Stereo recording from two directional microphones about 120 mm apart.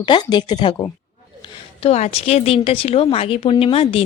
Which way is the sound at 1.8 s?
60° left (ahead or behind).